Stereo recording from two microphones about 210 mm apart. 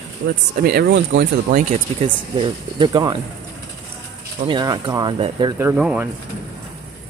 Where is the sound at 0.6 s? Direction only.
45° right (ahead or behind).